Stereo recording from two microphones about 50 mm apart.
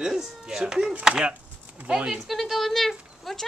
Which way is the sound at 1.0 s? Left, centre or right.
Centre.